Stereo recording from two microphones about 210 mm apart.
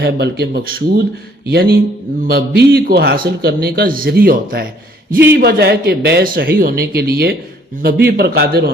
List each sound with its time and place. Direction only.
0.0 s a man's voice: 50° right (ahead or behind)